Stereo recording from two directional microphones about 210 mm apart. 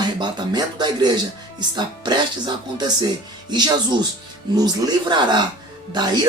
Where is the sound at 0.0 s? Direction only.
20° right (ahead or behind).